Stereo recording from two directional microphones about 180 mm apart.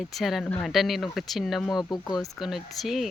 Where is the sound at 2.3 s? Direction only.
Centre (ahead or behind).